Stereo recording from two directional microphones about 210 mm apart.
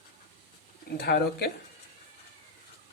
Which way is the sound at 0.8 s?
50° left (ahead or behind).